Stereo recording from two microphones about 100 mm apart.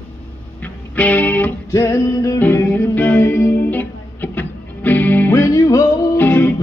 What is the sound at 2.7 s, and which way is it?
Music, 20° left (ahead or behind).